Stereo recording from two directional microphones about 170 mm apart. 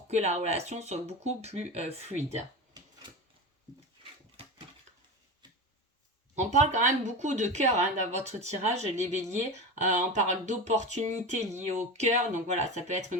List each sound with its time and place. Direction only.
0.1 s speech: 40° right (ahead or behind)
6.3 s speech: 40° right (ahead or behind)